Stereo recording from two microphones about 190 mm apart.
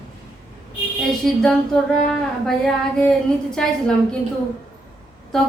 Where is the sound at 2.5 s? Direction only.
5° left (ahead or behind).